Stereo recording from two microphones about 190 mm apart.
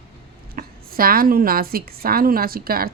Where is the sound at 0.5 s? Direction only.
50° right (ahead or behind).